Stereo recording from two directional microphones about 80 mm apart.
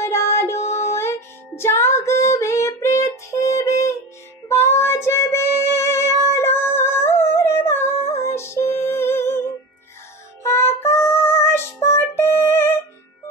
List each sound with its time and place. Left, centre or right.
0.0 s music: left
1.6 s female singing: left
4.5 s music: left
10.4 s music: left